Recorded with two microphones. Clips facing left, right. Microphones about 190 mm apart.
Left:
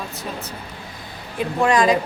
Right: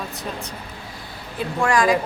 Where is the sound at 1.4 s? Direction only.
20° left (ahead or behind).